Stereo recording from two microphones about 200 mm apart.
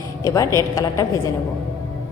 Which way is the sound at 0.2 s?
15° left (ahead or behind).